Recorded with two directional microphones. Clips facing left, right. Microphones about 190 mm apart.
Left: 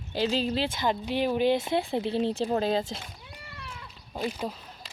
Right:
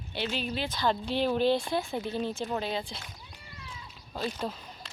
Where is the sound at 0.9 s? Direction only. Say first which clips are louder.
Even; 15° left (ahead or behind); by 2.9 s 40° left (ahead or behind).